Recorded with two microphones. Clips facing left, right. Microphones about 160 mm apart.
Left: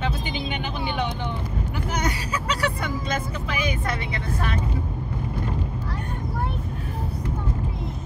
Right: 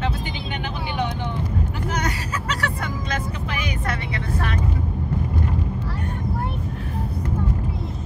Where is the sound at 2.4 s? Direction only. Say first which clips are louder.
Left 2 dB; 15° left (ahead or behind).